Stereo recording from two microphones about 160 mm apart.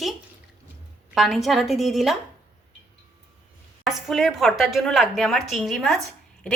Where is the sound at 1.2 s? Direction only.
Centre (ahead or behind).